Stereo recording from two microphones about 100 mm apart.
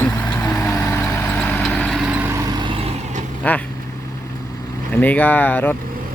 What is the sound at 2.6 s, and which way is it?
Vehicle, 65° right (ahead or behind).